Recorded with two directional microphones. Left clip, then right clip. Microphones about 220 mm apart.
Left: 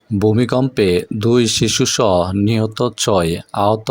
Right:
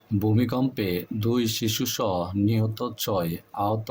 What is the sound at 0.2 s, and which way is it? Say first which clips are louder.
Speech: left 10 dB; 35° left (ahead or behind).